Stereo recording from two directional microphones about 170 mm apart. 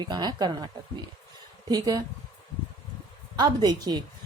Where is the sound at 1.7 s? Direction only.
20° right (ahead or behind).